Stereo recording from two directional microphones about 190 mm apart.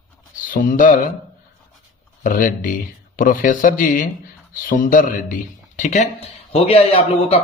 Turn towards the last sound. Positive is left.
turn(degrees=30)  # may be behind; listen again after turning